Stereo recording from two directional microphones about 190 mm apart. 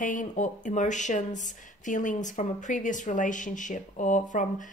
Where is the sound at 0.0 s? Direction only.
40° left (ahead or behind).